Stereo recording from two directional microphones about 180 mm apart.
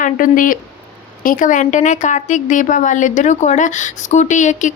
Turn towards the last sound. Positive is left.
turn(degrees=45)  # may be behind; listen again after turning